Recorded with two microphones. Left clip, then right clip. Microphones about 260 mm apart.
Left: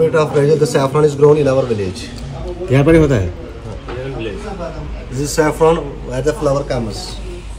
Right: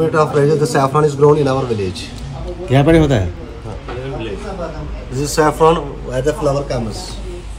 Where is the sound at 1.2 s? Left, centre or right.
Right.